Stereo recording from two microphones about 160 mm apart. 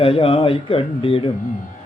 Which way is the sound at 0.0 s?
35° left (ahead or behind).